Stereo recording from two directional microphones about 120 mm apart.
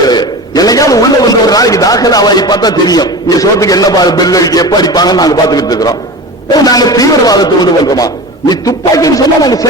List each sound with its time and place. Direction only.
0.1 s a man's voice: 35° left (ahead or behind)